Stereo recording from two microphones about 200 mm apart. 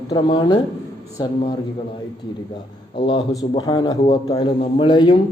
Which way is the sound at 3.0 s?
25° left (ahead or behind).